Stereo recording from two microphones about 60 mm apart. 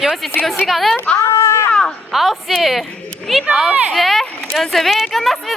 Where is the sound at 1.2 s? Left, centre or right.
Left.